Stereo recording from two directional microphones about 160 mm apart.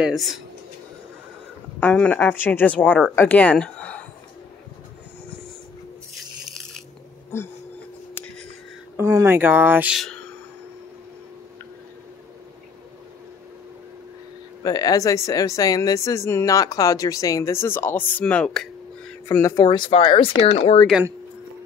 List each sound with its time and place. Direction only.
0.0 s speech: centre (ahead or behind)
1.8 s speech: 10° left (ahead or behind)
6.4 s a sound: centre (ahead or behind)
7.3 s speech: 15° left (ahead or behind)
8.9 s speech: 15° right (ahead or behind)
9.9 s speech: 5° left (ahead or behind)
14.6 s speech: 25° left (ahead or behind); by 19.1 s 5° left (ahead or behind)
19.2 s speech: 20° left (ahead or behind); by 20.8 s 35° left (ahead or behind)